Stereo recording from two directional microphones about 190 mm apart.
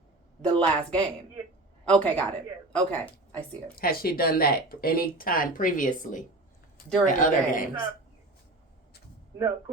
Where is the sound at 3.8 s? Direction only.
50° left (ahead or behind).